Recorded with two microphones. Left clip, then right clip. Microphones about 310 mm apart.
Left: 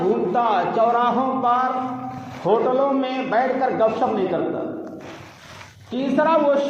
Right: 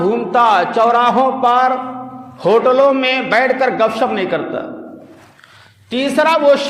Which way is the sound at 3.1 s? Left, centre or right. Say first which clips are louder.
Right 7 dB; right.